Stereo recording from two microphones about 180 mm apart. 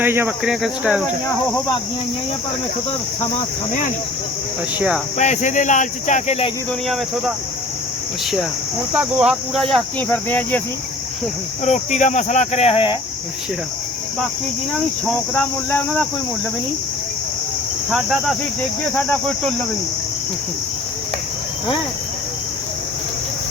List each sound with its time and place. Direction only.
0.0 s speech: 10° right (ahead or behind)
5.1 s speech: 40° left (ahead or behind)
6.8 s speech: centre (ahead or behind)
9.0 s speech: 5° right (ahead or behind)
11.6 s speech: 40° left (ahead or behind)
15.0 s speech: 10° left (ahead or behind)
17.9 s speech: centre (ahead or behind)